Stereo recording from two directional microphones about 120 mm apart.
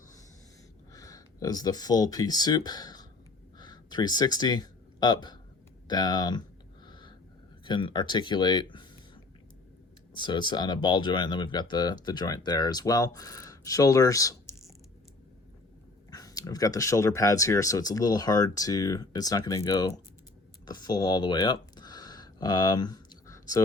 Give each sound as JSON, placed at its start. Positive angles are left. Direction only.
{"t": 0.9, "sound": "speech", "side_deg": 30}
{"t": 6.8, "sound": "a sound", "side_deg": 40}
{"t": 7.6, "sound": "speech", "side_deg": 40}
{"t": 10.2, "sound": "speech", "side_deg": 40}
{"t": 16.0, "sound": "speech", "side_deg": 30}
{"t": 20.7, "sound": "a sound", "side_deg": 35}